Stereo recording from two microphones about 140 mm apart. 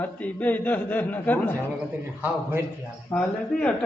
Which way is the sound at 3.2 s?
10° left (ahead or behind).